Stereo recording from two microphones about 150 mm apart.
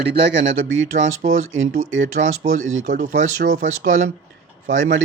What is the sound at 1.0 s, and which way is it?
Speech, 55° right (ahead or behind).